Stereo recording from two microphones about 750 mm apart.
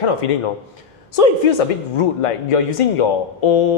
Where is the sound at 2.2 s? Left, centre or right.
Left.